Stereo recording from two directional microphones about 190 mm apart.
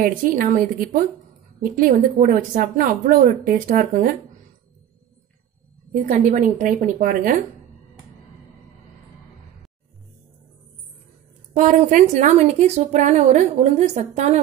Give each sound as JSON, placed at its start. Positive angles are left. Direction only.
{"t": 0.0, "sound": "a woman's voice", "side_deg": -45}
{"t": 6.0, "sound": "a woman's voice", "side_deg": -40}
{"t": 11.5, "sound": "a woman's voice", "side_deg": -40}